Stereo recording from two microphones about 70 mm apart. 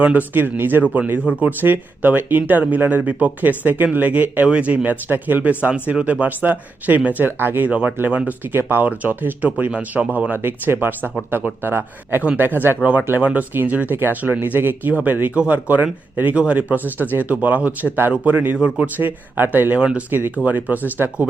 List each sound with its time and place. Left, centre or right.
0.0 s speech: right
7.7 s a man's voice: centre
18.9 s speech: right
19.8 s speech: centre
20.1 s speech: right